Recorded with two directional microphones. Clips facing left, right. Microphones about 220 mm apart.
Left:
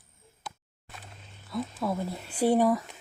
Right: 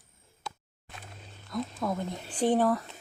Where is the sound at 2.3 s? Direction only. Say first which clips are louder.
Left 2 dB; 10° left (ahead or behind).